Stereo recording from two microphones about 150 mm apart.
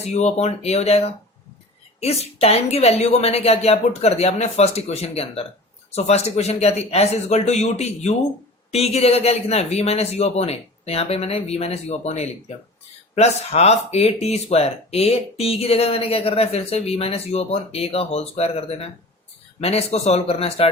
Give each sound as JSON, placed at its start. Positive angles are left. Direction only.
{"t": 0.0, "sound": "speech", "side_deg": 45}